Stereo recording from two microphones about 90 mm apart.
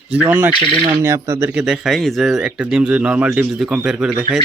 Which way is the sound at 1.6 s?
5° right (ahead or behind).